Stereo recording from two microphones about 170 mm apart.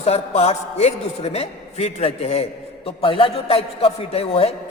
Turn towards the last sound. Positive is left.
turn(degrees=35)  # may be behind; listen again after turning